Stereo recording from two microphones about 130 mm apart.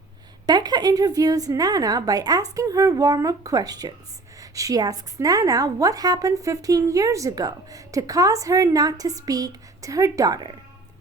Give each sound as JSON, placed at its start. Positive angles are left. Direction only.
{"t": 0.4, "sound": "a woman's voice", "side_deg": -30}